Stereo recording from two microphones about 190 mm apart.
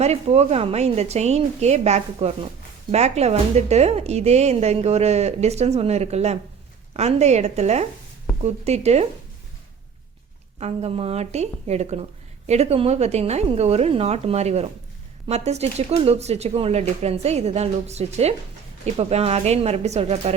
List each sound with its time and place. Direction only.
0.0 s speech: 35° right (ahead or behind)
10.6 s speech: 35° right (ahead or behind)